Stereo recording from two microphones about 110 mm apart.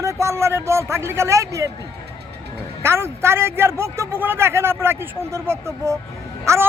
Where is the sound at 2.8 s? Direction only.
25° right (ahead or behind).